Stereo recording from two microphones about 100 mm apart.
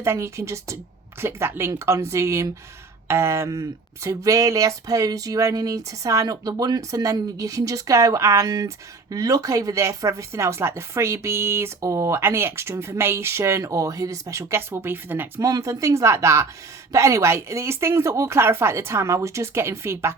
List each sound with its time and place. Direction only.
0.0 s speech: 30° right (ahead or behind)
15.4 s speech: 30° right (ahead or behind)